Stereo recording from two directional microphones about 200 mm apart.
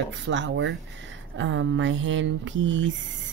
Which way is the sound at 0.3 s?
65° right (ahead or behind).